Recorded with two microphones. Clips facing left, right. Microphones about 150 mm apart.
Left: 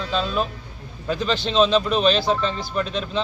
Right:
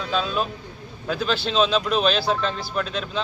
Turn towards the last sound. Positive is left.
turn(degrees=0)  # may be behind; listen again after turning